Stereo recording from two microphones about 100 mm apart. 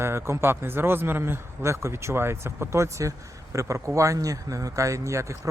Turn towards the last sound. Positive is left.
turn(degrees=-30)  # may be behind; listen again after turning